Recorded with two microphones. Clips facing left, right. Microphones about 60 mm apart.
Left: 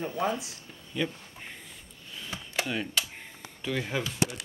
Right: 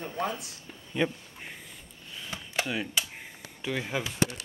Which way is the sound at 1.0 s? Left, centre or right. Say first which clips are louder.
Right 3 dB; right.